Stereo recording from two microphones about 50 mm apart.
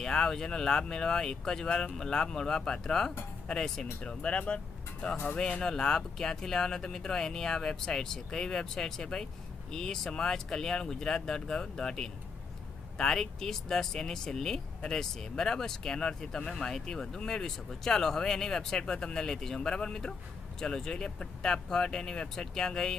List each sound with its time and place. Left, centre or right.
0.0 s speech: centre